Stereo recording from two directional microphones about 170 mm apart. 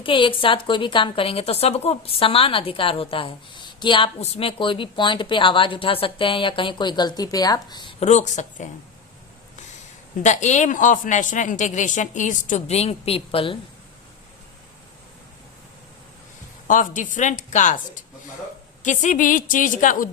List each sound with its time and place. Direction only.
0.0 s a woman's voice: 30° left (ahead or behind)
7.9 s a woman's voice: 40° left (ahead or behind)
10.2 s a woman's voice: 45° left (ahead or behind)
16.6 s a woman's voice: 50° left (ahead or behind)